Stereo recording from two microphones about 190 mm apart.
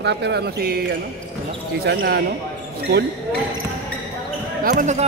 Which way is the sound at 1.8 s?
55° right (ahead or behind).